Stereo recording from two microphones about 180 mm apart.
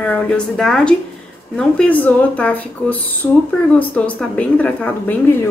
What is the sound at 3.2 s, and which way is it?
Speech, 20° left (ahead or behind).